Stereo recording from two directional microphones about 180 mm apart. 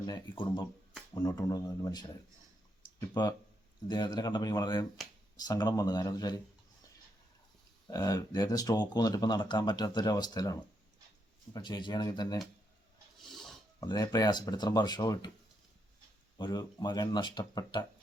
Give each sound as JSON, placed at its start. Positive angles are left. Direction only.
{"t": 0.0, "sound": "speech", "side_deg": 25}
{"t": 3.2, "sound": "speech", "side_deg": 25}
{"t": 7.9, "sound": "speech", "side_deg": 20}
{"t": 13.1, "sound": "filing", "side_deg": 0}
{"t": 13.7, "sound": "speech", "side_deg": 20}
{"t": 16.4, "sound": "speech", "side_deg": 25}